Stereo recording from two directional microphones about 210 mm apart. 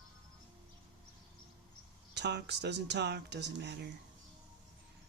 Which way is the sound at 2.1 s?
55° right (ahead or behind).